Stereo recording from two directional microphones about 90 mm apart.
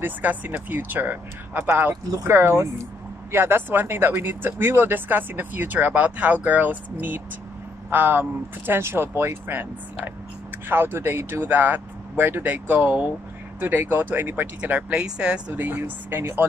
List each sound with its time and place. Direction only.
0.0 s speech: 20° right (ahead or behind)